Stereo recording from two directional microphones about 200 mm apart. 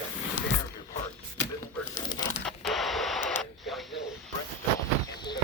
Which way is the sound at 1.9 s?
20° left (ahead or behind).